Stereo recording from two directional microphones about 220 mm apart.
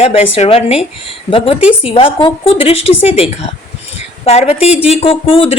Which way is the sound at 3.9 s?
30° left (ahead or behind).